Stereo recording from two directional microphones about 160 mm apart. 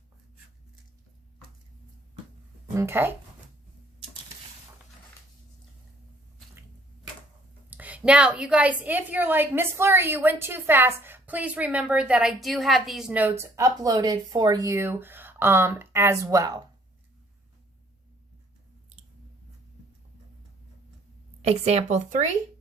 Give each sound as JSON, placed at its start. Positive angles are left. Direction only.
{"t": 2.7, "sound": "a woman's voice", "side_deg": -15}
{"t": 7.7, "sound": "a woman's voice", "side_deg": -10}
{"t": 13.4, "sound": "a woman's voice", "side_deg": -20}
{"t": 21.4, "sound": "speech", "side_deg": -40}